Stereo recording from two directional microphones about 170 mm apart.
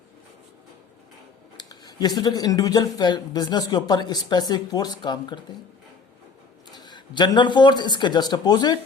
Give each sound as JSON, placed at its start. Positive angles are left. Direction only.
{"t": 1.5, "sound": "speech", "side_deg": 25}
{"t": 6.7, "sound": "speech", "side_deg": 25}